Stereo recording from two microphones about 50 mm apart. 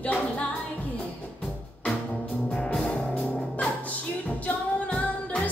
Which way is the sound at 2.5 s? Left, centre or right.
Centre.